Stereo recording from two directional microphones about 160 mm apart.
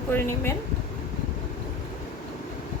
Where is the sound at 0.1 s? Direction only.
15° left (ahead or behind).